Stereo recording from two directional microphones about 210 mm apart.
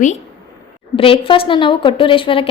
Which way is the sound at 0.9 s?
25° left (ahead or behind).